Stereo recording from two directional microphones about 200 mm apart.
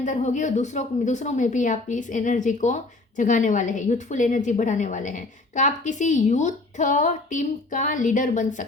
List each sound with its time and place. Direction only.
0.0 s a woman's voice: 35° left (ahead or behind)